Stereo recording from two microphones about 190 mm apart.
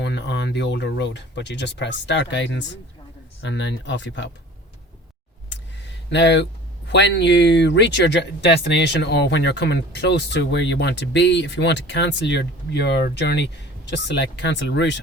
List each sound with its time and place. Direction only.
0.0 s speech: 65° left (ahead or behind)
6.1 s speech: 70° left (ahead or behind)